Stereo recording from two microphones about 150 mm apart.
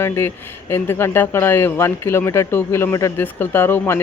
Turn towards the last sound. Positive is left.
turn(degrees=15)  # may be behind; listen again after turning